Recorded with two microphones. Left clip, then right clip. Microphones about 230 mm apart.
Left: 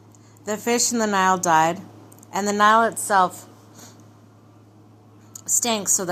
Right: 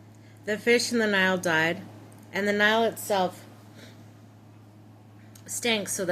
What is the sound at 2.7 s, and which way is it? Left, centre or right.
Speech, left.